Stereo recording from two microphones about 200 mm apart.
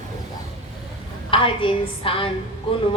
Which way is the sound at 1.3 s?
25° left (ahead or behind).